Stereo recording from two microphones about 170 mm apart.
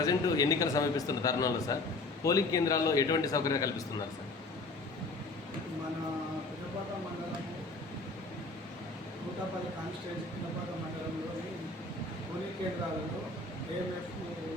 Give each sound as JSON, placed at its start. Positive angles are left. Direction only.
{"t": 0.0, "sound": "a man's voice", "side_deg": 20}